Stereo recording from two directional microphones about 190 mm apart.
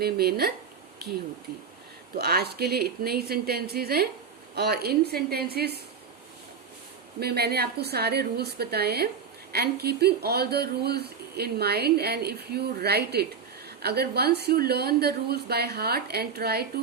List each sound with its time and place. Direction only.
0.0 s speech: 55° right (ahead or behind)
2.1 s speech: 55° right (ahead or behind)
7.2 s speech: 55° right (ahead or behind)